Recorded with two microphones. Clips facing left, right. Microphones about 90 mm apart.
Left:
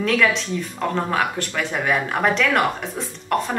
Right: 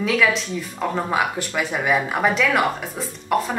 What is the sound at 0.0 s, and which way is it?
Speech, centre (ahead or behind).